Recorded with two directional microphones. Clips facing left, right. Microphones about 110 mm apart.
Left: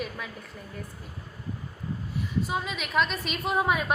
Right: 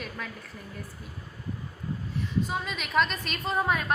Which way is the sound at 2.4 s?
5° left (ahead or behind).